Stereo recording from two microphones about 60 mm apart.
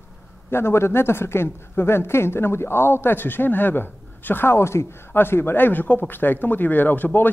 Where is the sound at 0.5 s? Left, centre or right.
Left.